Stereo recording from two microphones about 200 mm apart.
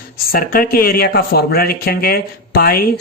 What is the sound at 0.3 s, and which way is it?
Speech, 45° left (ahead or behind).